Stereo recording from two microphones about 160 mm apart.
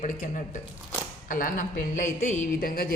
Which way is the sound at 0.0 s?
55° left (ahead or behind).